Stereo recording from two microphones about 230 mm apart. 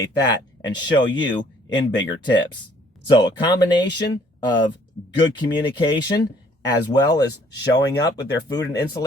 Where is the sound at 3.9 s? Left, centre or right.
Left.